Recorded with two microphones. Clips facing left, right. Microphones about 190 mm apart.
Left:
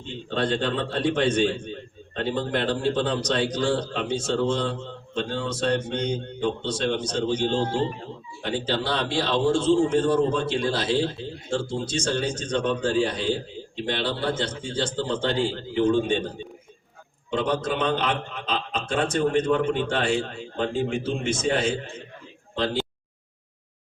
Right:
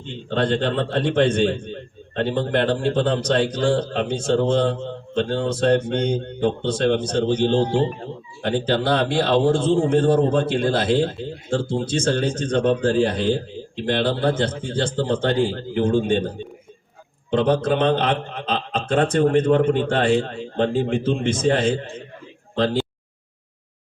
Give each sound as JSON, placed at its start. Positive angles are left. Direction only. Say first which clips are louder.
{"t": 0.3, "sound": "a man's voice", "louder": "right 4 dB", "side_deg": -50}
{"t": 17.3, "sound": "a man's voice", "louder": "right 6 dB", "side_deg": -55}
{"t": 20.6, "sound": "speech", "louder": "right 5 dB", "side_deg": -35}